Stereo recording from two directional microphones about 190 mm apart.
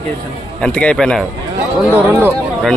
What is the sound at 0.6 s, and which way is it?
Speech, 5° left (ahead or behind).